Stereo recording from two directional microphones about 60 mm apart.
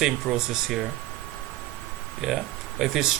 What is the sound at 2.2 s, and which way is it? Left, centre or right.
Speech, centre.